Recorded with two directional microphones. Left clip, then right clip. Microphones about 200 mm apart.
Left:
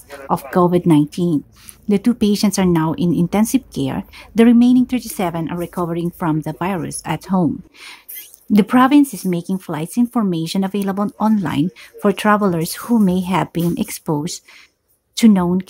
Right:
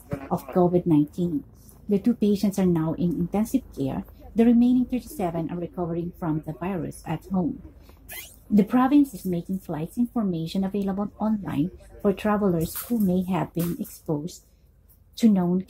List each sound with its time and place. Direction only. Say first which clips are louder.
0.6 s speech: left 6 dB; 30° left (ahead or behind)
8.5 s speech: left 8 dB; 25° left (ahead or behind)
15.1 s speech: left 8 dB; 30° left (ahead or behind)